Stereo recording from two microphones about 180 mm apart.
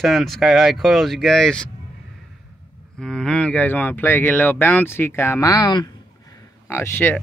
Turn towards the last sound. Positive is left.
turn(degrees=10)  # may be behind; listen again after turning